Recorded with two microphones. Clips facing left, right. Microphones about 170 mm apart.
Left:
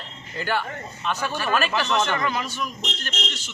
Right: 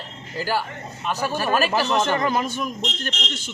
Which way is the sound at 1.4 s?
40° right (ahead or behind).